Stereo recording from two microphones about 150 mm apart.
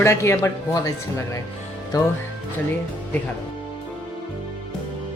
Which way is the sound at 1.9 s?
25° left (ahead or behind).